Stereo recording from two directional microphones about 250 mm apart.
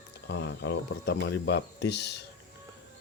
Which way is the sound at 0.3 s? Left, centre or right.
Left.